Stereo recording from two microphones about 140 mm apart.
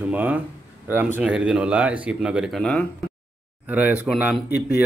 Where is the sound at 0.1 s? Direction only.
10° right (ahead or behind).